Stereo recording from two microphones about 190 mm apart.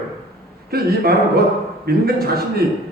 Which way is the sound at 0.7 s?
55° right (ahead or behind).